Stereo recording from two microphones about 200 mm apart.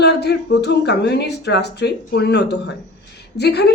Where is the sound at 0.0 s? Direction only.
55° left (ahead or behind).